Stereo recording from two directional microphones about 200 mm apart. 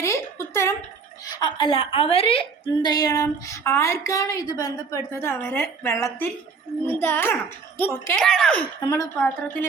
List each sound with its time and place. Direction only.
0.0 s a sound: 15° left (ahead or behind)
1.2 s a woman's voice: 20° left (ahead or behind); by 8.6 s 5° left (ahead or behind)
8.9 s a woman's voice: 15° left (ahead or behind)